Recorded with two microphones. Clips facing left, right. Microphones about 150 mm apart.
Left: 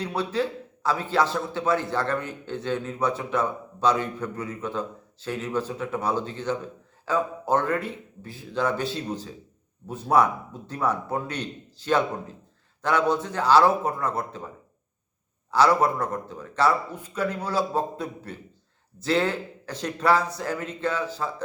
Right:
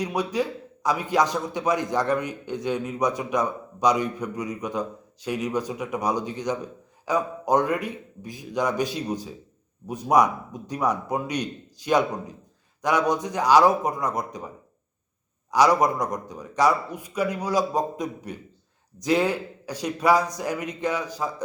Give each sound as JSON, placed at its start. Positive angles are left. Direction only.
{"t": 0.0, "sound": "a man's voice", "side_deg": -15}
{"t": 15.5, "sound": "a man's voice", "side_deg": -15}